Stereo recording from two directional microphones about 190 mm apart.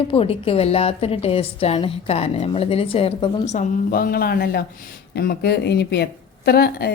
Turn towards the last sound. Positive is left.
turn(degrees=55)  # may be behind; listen again after turning